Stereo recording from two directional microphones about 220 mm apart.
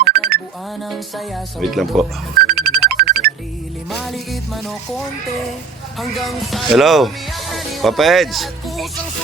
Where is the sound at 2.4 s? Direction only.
45° right (ahead or behind).